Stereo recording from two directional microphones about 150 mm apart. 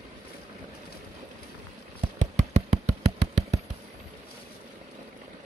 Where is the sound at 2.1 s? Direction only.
50° right (ahead or behind).